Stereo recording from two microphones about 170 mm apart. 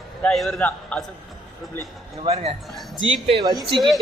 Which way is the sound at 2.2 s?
35° right (ahead or behind).